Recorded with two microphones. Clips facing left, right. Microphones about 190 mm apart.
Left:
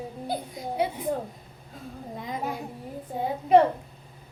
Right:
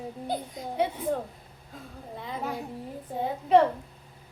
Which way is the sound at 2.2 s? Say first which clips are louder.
Left 2 dB; 15° left (ahead or behind).